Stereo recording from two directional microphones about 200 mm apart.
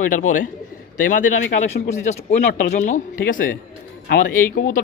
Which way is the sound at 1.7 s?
35° left (ahead or behind).